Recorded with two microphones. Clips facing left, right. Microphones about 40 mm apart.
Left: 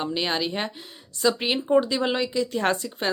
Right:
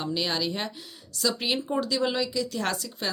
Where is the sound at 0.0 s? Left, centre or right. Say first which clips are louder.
Left 2 dB; left.